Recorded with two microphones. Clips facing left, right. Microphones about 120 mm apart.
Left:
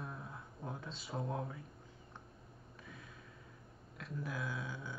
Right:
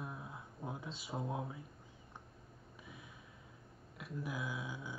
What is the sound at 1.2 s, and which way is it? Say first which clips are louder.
Speech: left 1 dB; 10° right (ahead or behind).